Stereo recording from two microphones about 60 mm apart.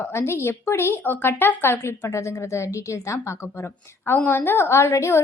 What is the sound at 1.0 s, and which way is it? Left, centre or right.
Speech, left.